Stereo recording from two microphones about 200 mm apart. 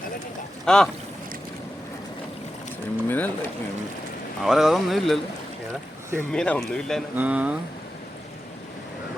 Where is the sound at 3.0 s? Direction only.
10° left (ahead or behind).